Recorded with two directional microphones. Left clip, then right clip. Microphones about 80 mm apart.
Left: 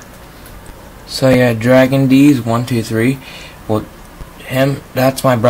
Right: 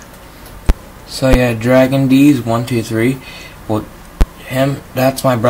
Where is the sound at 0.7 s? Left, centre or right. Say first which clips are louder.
Right 13 dB; centre.